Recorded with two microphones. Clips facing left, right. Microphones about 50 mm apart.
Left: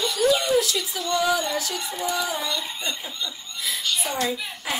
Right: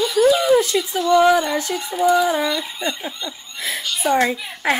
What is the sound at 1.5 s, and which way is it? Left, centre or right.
Snicker, right.